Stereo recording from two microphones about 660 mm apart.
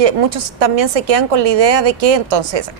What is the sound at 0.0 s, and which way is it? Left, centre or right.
Speech, right.